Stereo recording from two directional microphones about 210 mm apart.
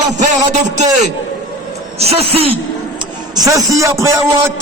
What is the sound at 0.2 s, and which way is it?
Speech, 35° right (ahead or behind).